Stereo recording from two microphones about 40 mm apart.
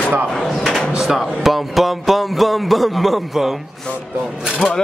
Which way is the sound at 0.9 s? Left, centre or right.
Centre.